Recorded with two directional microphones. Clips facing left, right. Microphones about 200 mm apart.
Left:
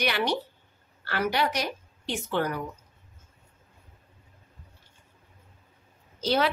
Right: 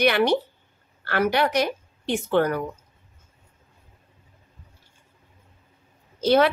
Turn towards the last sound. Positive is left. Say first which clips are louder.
# right 7 dB
turn(degrees=-55)  # may be behind; listen again after turning